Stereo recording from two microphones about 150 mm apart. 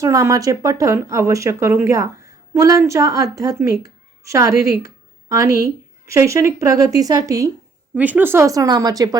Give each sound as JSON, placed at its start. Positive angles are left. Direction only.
{"t": 0.0, "sound": "speech", "side_deg": -20}
{"t": 7.9, "sound": "speech", "side_deg": -10}